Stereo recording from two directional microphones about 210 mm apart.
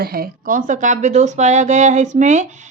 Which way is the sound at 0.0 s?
45° right (ahead or behind).